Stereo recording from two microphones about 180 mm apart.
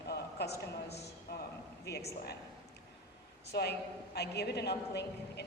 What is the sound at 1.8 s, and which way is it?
Speech, 65° left (ahead or behind).